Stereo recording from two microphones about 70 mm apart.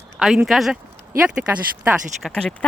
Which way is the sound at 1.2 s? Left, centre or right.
Centre.